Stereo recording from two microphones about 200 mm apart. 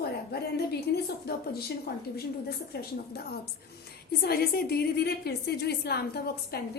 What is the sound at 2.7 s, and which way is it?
A woman's voice, 55° left (ahead or behind).